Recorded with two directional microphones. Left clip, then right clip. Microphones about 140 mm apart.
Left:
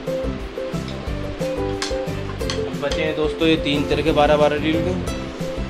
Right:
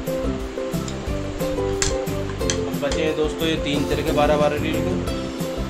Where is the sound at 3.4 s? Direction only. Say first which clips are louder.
Left 4 dB; 40° left (ahead or behind).